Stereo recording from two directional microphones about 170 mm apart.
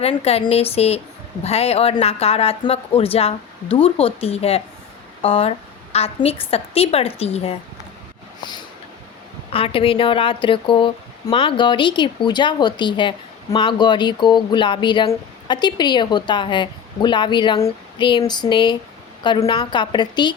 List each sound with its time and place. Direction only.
0.0 s speech: 35° left (ahead or behind)
9.5 s speech: 35° left (ahead or behind)